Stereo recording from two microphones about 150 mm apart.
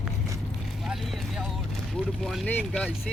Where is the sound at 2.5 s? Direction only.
10° left (ahead or behind).